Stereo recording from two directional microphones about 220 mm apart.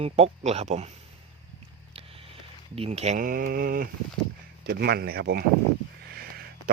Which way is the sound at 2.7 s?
25° right (ahead or behind).